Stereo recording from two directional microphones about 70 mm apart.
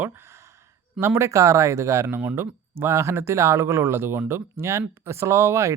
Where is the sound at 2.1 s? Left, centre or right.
Centre.